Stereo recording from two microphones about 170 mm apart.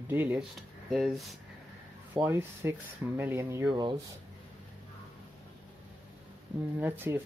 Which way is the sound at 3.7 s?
30° right (ahead or behind).